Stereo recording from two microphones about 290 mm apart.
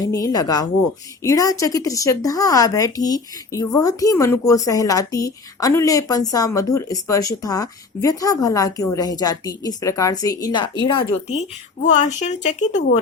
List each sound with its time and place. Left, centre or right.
0.0 s a woman's voice: centre